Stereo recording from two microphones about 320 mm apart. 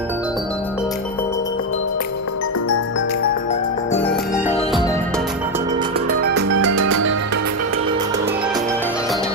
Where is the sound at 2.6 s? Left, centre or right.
Left.